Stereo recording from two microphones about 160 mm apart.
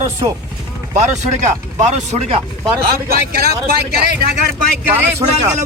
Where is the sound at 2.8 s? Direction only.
70° right (ahead or behind).